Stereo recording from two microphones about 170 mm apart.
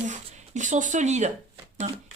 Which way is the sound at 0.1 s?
45° right (ahead or behind).